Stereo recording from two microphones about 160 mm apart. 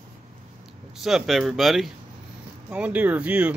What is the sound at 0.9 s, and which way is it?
Speech, centre (ahead or behind).